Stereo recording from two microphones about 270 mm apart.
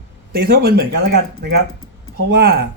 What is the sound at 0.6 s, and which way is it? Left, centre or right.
Speech, right.